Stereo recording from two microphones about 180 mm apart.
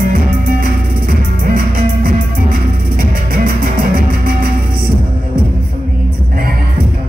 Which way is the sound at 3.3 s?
55° right (ahead or behind).